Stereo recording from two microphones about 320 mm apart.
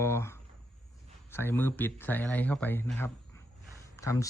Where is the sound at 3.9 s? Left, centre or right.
Centre.